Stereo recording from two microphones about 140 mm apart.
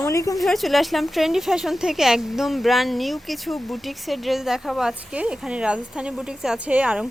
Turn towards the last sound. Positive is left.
turn(degrees=-10)  # may be behind; listen again after turning